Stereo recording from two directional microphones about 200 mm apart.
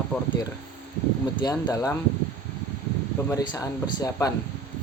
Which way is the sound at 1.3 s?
20° left (ahead or behind).